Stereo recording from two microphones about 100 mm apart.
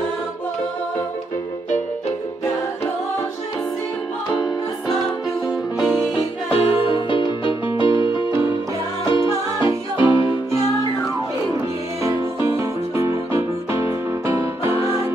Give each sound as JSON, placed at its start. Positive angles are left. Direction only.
{"t": 4.4, "sound": "music", "side_deg": 40}
{"t": 5.8, "sound": "music", "side_deg": 0}
{"t": 6.5, "sound": "music", "side_deg": 70}
{"t": 12.0, "sound": "music", "side_deg": -35}